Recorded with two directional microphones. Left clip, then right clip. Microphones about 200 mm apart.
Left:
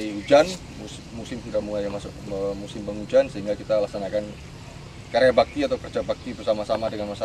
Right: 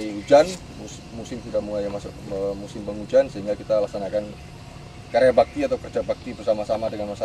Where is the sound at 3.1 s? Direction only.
5° right (ahead or behind).